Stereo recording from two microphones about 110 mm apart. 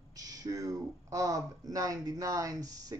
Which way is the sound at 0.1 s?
35° right (ahead or behind).